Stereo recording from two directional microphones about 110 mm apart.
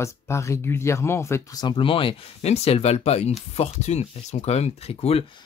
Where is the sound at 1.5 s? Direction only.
50° left (ahead or behind); by 5.3 s 65° left (ahead or behind).